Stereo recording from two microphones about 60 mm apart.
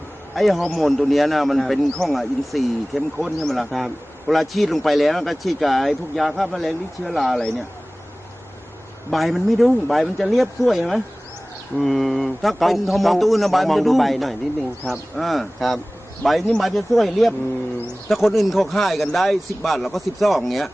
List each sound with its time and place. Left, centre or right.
0.3 s a man's voice: centre
9.0 s a man's voice: centre